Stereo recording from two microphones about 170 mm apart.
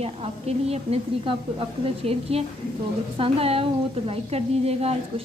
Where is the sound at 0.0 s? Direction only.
35° right (ahead or behind).